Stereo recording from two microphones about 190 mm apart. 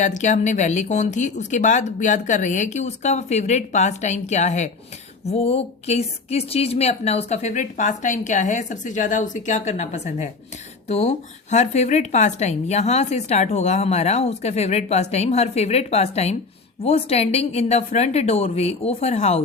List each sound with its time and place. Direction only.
0.0 s speech: 40° left (ahead or behind)